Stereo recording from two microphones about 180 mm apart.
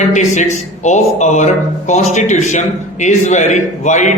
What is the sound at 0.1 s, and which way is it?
A man's voice, 40° left (ahead or behind).